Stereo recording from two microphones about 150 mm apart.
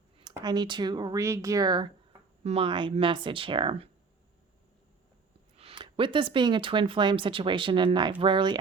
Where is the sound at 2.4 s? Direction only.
40° right (ahead or behind).